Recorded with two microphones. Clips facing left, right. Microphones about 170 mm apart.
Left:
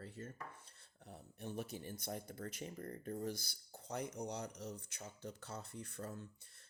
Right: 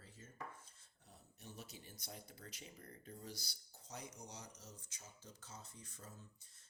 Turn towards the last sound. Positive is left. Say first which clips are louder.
# left 11 dB
turn(degrees=65)  # may be behind; listen again after turning